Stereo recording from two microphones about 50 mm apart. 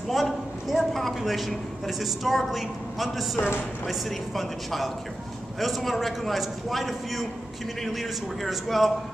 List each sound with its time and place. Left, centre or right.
0.1 s a man's voice: centre
3.3 s speech: left
4.4 s a man's voice: centre